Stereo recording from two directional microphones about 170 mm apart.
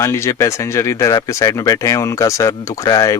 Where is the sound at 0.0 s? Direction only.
15° left (ahead or behind).